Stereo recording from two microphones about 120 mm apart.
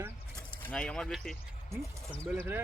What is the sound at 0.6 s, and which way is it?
Speech, 10° left (ahead or behind).